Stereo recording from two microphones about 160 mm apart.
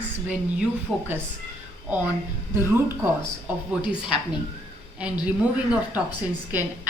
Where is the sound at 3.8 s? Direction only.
30° left (ahead or behind).